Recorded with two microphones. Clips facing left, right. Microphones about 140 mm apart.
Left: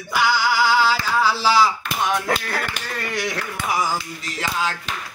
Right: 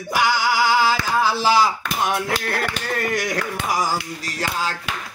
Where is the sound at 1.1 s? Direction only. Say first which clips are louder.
Even; 50° right (ahead or behind).